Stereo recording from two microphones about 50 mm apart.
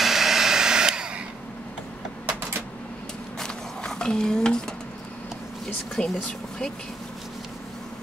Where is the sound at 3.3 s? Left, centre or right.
Centre.